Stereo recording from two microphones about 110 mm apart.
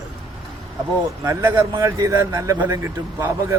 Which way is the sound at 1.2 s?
25° right (ahead or behind).